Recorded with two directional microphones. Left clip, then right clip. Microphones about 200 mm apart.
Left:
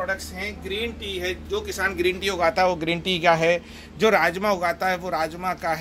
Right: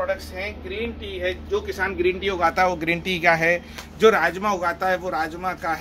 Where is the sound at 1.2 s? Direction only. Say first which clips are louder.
Right 4 dB; 55° left (ahead or behind).